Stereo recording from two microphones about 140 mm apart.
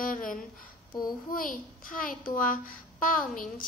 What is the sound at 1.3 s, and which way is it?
A child's voice, 80° left.